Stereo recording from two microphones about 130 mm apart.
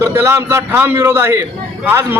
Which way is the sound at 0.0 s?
15° right (ahead or behind).